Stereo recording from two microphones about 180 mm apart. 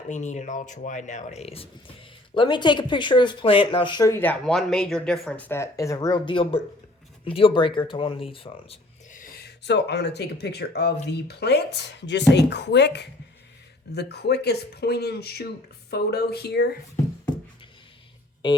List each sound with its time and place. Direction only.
0.1 s speech: 40° left (ahead or behind)
9.1 s speech: 55° left (ahead or behind)